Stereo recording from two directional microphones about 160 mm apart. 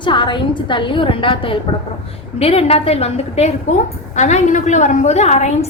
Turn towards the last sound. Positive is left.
turn(degrees=45)  # may be behind; listen again after turning